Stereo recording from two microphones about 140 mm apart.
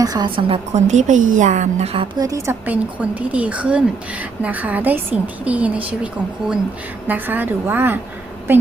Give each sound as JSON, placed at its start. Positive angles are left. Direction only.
{"t": 0.0, "sound": "a woman's voice", "side_deg": -30}
{"t": 0.7, "sound": "a woman's voice", "side_deg": -55}
{"t": 2.1, "sound": "a woman's voice", "side_deg": -25}
{"t": 7.1, "sound": "a woman's voice", "side_deg": -15}